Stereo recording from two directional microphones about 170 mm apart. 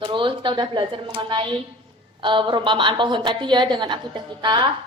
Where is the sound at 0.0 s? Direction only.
30° right (ahead or behind).